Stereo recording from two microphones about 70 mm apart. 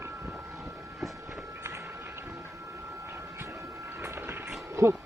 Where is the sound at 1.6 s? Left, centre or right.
Right.